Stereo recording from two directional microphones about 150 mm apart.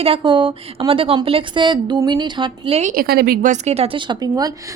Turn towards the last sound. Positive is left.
turn(degrees=-25)  # may be behind; listen again after turning